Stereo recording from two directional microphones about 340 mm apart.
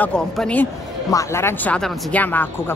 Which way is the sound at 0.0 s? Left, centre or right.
Centre.